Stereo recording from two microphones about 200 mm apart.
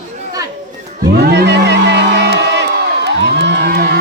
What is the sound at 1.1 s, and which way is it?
Crowd, 55° right (ahead or behind).